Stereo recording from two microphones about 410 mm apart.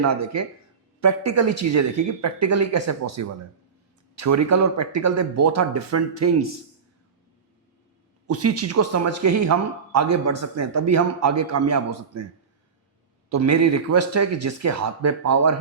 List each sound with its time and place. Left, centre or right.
1.0 s speech: right
8.3 s speech: right
13.3 s speech: right